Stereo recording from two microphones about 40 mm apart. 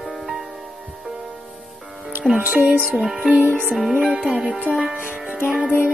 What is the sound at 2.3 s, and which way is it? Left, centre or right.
Speech, right.